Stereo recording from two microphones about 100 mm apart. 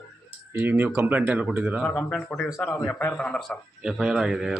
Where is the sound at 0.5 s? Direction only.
20° right (ahead or behind).